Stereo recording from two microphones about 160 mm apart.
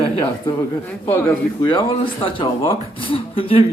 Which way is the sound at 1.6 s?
35° left (ahead or behind).